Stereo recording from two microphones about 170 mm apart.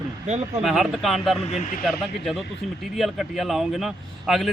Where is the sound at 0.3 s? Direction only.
40° right (ahead or behind).